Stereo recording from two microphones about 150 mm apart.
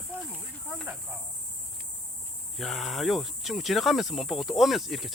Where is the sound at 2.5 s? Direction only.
Centre (ahead or behind).